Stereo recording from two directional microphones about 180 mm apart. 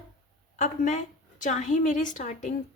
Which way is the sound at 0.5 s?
40° left (ahead or behind).